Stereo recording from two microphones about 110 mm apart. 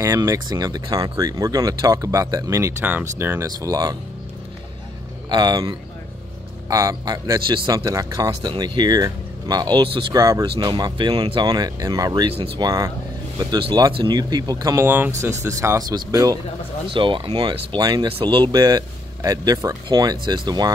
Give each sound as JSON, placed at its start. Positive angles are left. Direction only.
{"t": 0.0, "sound": "speech", "side_deg": -25}
{"t": 2.8, "sound": "speech", "side_deg": -20}
{"t": 3.4, "sound": "speech", "side_deg": -35}
{"t": 5.3, "sound": "speech", "side_deg": -40}
{"t": 7.3, "sound": "speech", "side_deg": -45}
{"t": 7.7, "sound": "speech", "side_deg": -30}
{"t": 10.1, "sound": "speech", "side_deg": -30}
{"t": 10.5, "sound": "speech", "side_deg": -40}
{"t": 13.9, "sound": "speech", "side_deg": -40}
{"t": 16.9, "sound": "speech", "side_deg": -50}